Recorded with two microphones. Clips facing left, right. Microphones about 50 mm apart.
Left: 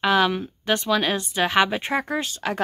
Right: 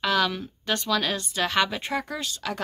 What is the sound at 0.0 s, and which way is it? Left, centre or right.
Speech, left.